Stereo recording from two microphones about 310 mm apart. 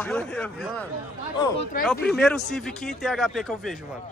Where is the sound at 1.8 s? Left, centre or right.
Centre.